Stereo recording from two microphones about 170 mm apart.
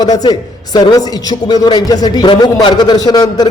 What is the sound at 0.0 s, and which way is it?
A man's voice, 20° left (ahead or behind).